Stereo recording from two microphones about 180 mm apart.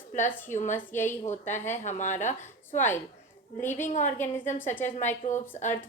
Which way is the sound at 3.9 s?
40° left (ahead or behind).